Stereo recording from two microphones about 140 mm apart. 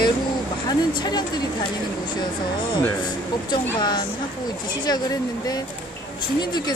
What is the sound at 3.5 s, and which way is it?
Speech, 30° left (ahead or behind).